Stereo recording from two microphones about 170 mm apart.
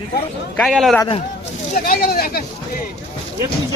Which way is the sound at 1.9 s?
60° left (ahead or behind).